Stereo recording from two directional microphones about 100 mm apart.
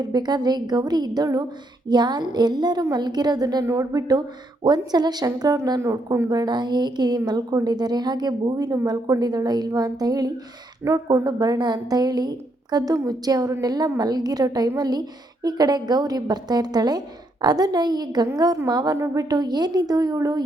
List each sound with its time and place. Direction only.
0.0 s a woman's voice: 45° right (ahead or behind)
11.3 s a woman's voice: 45° right (ahead or behind)